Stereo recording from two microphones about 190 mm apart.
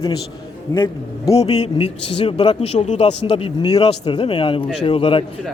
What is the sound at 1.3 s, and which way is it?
A man's voice, 30° left (ahead or behind).